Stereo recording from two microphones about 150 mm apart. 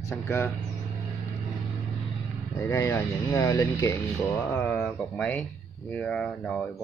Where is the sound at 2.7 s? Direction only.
20° left (ahead or behind).